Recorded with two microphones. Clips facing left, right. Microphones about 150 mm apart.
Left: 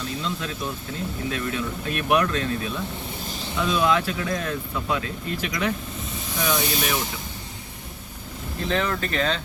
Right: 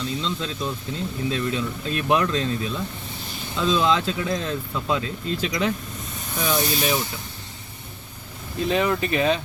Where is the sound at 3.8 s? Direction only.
25° right (ahead or behind).